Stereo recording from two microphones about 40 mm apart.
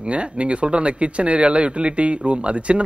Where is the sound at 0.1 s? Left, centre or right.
Right.